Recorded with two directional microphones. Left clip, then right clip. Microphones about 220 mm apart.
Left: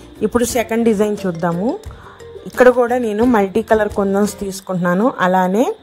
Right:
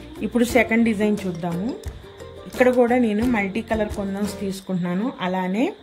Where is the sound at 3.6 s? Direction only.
75° left (ahead or behind).